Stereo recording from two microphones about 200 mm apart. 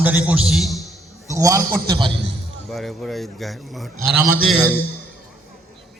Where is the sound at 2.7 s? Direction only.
Centre (ahead or behind).